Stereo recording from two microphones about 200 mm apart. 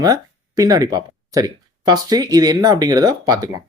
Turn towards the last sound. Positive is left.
turn(degrees=-20)  # may be behind; listen again after turning